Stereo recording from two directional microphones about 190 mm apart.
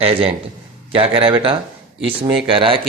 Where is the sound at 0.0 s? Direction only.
30° right (ahead or behind).